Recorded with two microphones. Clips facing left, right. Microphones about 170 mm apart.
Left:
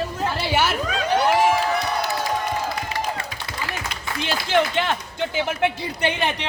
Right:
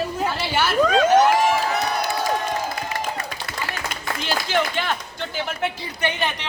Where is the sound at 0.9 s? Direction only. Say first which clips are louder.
Right 7 dB; 45° right (ahead or behind).